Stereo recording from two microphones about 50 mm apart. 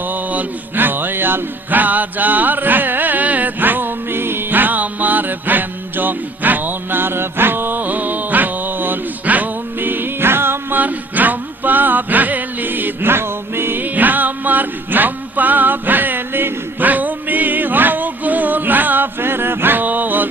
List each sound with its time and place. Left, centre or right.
0.1 s music: right
10.8 s music: right